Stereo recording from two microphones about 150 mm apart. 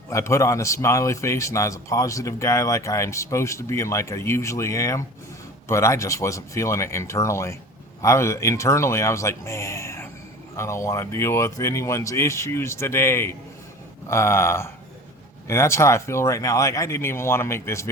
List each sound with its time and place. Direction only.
0.1 s a man's voice: 20° left (ahead or behind)